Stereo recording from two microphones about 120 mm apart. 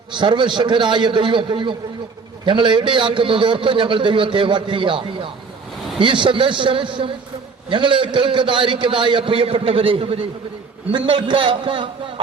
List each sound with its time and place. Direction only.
0.1 s a man's voice: 40° right (ahead or behind)